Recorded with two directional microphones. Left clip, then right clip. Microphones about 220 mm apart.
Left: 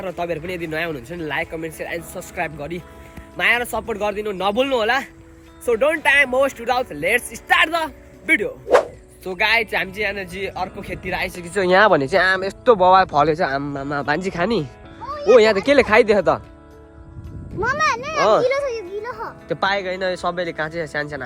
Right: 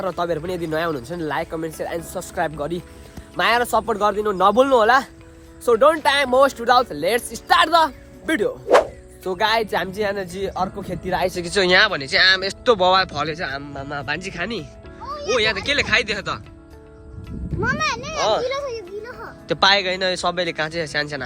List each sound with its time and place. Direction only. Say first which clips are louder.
0.0 s a man's voice: right 2 dB; 15° right (ahead or behind)
9.7 s speech: even; 10° right (ahead or behind)
10.2 s speech: right 1 dB; 10° left (ahead or behind)
10.8 s speech: right 2 dB; 10° right (ahead or behind)
11.5 s speech: left 3 dB; centre (ahead or behind)
17.6 s children playing: left 3 dB; 40° left (ahead or behind)
19.0 s music: left 6 dB; 20° left (ahead or behind)
19.5 s speech: right 4 dB; centre (ahead or behind)